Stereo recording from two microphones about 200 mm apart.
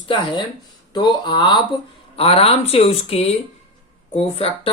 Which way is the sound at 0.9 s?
20° left (ahead or behind).